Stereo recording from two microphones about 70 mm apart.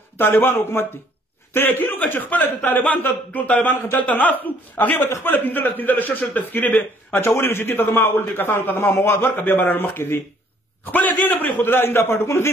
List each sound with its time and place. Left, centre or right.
0.2 s a man's voice: left